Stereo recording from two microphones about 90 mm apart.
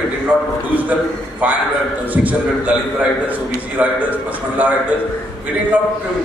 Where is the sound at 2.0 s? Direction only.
15° right (ahead or behind).